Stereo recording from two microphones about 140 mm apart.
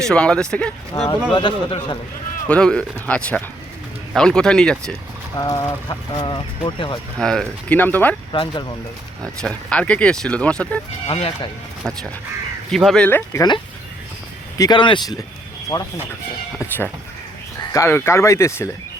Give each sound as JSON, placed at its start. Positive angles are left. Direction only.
{"t": 0.0, "sound": "speech", "side_deg": 5}
{"t": 1.3, "sound": "speech", "side_deg": 35}
{"t": 2.5, "sound": "speech", "side_deg": 5}
{"t": 5.4, "sound": "speech", "side_deg": 25}
{"t": 7.2, "sound": "speech", "side_deg": 5}
{"t": 8.3, "sound": "speech", "side_deg": 35}
{"t": 9.2, "sound": "speech", "side_deg": 5}
{"t": 11.0, "sound": "speech", "side_deg": 45}
{"t": 12.7, "sound": "speech", "side_deg": 5}
{"t": 13.1, "sound": "speech", "side_deg": 15}
{"t": 14.6, "sound": "speech", "side_deg": 35}
{"t": 16.6, "sound": "speech", "side_deg": 15}